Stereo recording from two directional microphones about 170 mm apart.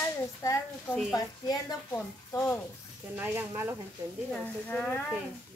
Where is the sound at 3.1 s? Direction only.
10° right (ahead or behind).